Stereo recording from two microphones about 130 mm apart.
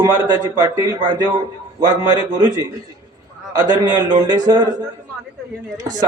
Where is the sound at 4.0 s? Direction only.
30° right (ahead or behind).